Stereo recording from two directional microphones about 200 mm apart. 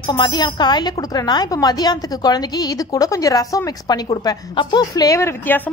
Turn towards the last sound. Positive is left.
turn(degrees=10)  # may be behind; listen again after turning